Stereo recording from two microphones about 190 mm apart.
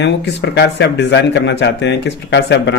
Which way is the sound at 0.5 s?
60° left (ahead or behind).